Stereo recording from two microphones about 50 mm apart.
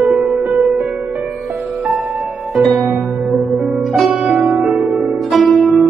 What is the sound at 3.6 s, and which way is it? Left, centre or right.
Music, centre.